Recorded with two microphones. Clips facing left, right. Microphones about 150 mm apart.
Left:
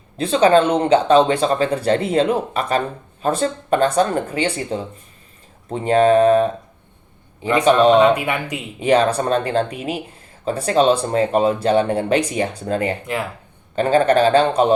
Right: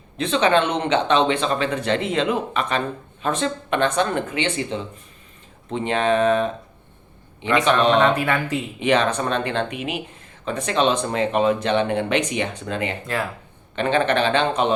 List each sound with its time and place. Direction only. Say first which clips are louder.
0.2 s speech: left 5 dB; 35° left (ahead or behind)
7.9 s speech: left 4 dB; 10° left (ahead or behind)
8.8 s speech: left 4 dB; 35° left (ahead or behind)
13.1 s speech: left 1 dB; 15° left (ahead or behind)
13.7 s speech: left 5 dB; 35° left (ahead or behind)